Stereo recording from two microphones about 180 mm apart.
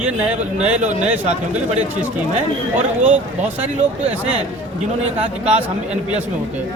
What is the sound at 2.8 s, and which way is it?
Speech, 40° right (ahead or behind).